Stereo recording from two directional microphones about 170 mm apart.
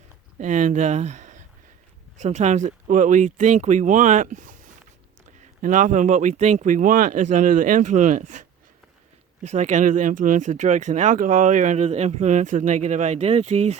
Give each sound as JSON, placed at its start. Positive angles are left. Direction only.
{"t": 0.3, "sound": "speech", "side_deg": -45}
{"t": 5.6, "sound": "speech", "side_deg": -50}
{"t": 9.5, "sound": "speech", "side_deg": -45}